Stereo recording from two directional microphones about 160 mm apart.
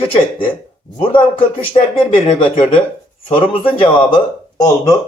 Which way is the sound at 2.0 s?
35° left (ahead or behind).